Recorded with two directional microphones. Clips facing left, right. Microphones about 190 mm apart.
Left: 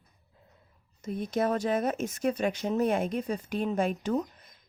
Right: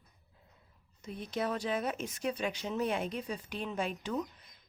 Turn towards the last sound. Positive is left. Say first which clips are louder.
# left 7 dB
turn(degrees=45)  # may be behind; listen again after turning